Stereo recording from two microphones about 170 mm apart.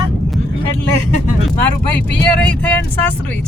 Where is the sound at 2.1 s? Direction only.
10° left (ahead or behind).